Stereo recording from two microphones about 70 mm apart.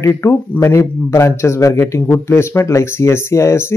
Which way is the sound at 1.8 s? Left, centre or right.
Left.